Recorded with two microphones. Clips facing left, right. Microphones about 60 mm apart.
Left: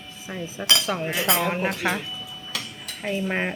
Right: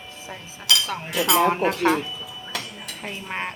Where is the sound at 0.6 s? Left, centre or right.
Centre.